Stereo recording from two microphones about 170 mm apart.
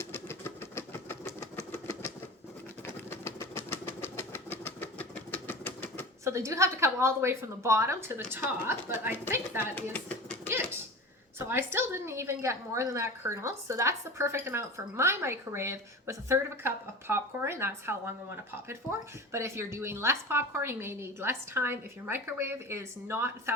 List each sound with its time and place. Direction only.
0.0 s engine: 15° left (ahead or behind)
1.9 s typewriter: 20° left (ahead or behind)
2.8 s engine: 15° left (ahead or behind)
6.2 s a woman's voice: 15° right (ahead or behind)
10.4 s a sound: 15° right (ahead or behind)
11.3 s a woman's voice: 15° right (ahead or behind)